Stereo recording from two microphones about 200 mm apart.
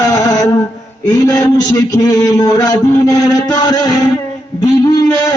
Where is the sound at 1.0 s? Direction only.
20° left (ahead or behind).